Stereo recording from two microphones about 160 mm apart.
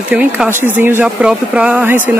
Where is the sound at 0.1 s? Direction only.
5° right (ahead or behind).